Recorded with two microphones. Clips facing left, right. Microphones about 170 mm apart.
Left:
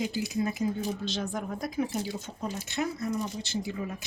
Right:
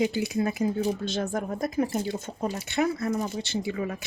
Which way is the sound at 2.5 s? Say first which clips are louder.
Right 5 dB; 65° right (ahead or behind).